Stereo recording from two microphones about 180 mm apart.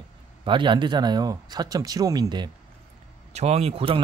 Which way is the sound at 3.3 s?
35° right (ahead or behind).